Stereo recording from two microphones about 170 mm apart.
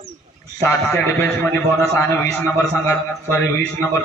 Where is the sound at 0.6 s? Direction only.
15° left (ahead or behind).